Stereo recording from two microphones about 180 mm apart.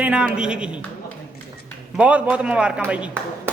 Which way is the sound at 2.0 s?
5° right (ahead or behind).